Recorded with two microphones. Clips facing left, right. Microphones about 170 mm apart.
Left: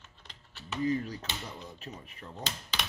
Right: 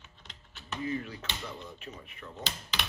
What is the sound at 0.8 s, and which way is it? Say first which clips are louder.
Speech: left 5 dB; 35° left (ahead or behind).